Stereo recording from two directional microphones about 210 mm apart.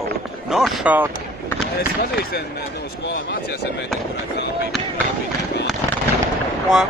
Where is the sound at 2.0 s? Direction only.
45° left (ahead or behind).